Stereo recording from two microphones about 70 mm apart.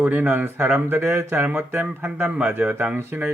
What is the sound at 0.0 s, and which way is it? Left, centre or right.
Speech, right.